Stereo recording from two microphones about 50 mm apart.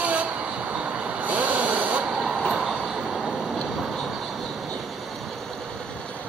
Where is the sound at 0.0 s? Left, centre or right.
Right.